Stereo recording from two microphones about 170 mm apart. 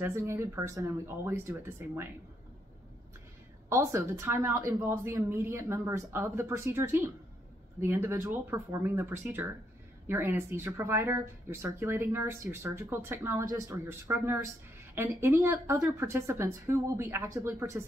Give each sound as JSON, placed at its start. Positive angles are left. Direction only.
{"t": 0.0, "sound": "speech", "side_deg": -15}
{"t": 3.6, "sound": "speech", "side_deg": -15}